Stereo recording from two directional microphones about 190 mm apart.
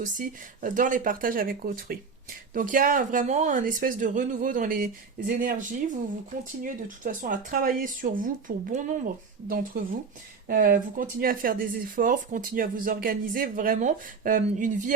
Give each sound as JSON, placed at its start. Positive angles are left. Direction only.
{"t": 0.0, "sound": "speech", "side_deg": -45}